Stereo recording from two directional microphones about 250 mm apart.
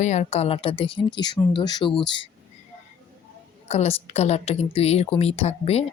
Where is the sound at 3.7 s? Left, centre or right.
Left.